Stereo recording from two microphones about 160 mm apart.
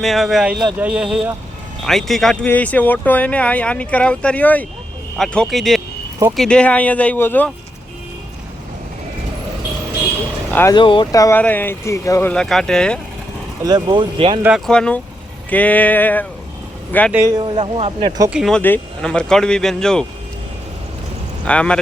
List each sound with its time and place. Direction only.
0.0 s speech: centre (ahead or behind)
10.5 s speech: 15° left (ahead or behind)
10.8 s speech: 30° left (ahead or behind)
12.3 s speech: 5° left (ahead or behind)
13.6 s speech: 25° right (ahead or behind)
14.7 s speech: 5° left (ahead or behind)
17.2 s speech: 30° right (ahead or behind)
18.3 s speech: centre (ahead or behind)
18.6 s speech: 10° left (ahead or behind)
21.4 s speech: 5° left (ahead or behind)